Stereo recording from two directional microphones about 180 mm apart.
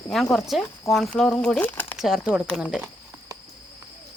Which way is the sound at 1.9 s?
Centre (ahead or behind).